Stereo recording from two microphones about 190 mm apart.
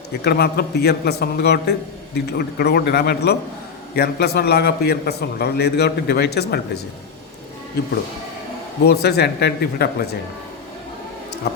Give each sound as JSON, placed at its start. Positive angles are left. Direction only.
{"t": 0.2, "sound": "a man's voice", "side_deg": 55}
{"t": 8.8, "sound": "a man's voice", "side_deg": 60}
{"t": 11.4, "sound": "a sound", "side_deg": 60}